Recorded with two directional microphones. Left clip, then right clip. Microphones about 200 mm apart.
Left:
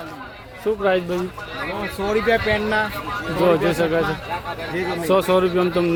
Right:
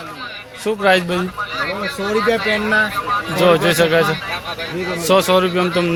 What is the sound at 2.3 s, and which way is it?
Speech, 40° right (ahead or behind).